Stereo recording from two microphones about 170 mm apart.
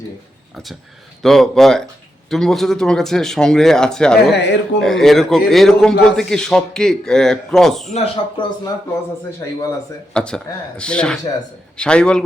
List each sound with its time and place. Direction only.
0.5 s a man's voice: centre (ahead or behind)
4.3 s a man's voice: 90° left
4.8 s a man's voice: centre (ahead or behind)
7.9 s speech: 30° left (ahead or behind)
10.2 s a man's voice: 5° left (ahead or behind)